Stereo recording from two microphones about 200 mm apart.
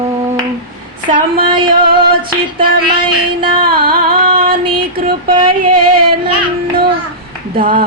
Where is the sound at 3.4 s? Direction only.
25° right (ahead or behind).